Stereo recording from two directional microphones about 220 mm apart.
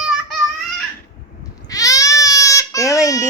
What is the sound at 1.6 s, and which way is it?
Goat, 15° left (ahead or behind).